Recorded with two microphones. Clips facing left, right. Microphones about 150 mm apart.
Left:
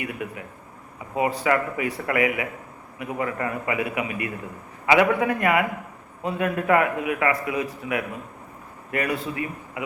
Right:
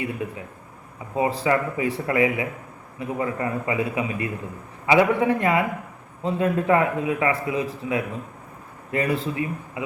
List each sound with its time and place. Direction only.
0.0 s speech: 30° right (ahead or behind)